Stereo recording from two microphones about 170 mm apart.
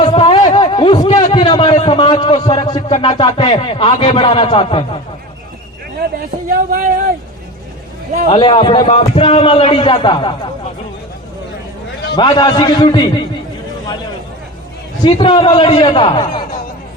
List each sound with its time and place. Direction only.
0.0 s a sound: 30° left (ahead or behind)
2.4 s a man's voice: 25° left (ahead or behind)
6.5 s speech: 60° right (ahead or behind)
8.3 s a man's voice: 30° left (ahead or behind)
12.1 s a man's voice: 25° left (ahead or behind)
15.0 s a man's voice: 30° left (ahead or behind)